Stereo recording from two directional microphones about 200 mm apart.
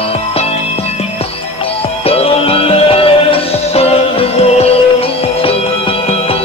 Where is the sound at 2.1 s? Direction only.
30° left (ahead or behind).